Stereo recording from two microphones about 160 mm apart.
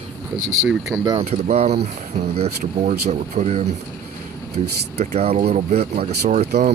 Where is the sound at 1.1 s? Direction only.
35° right (ahead or behind).